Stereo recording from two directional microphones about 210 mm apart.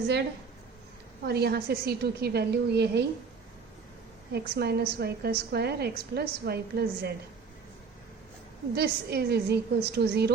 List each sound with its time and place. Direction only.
1.2 s a woman's voice: 50° right (ahead or behind)
4.3 s a woman's voice: 50° right (ahead or behind)
8.7 s a woman's voice: 50° right (ahead or behind)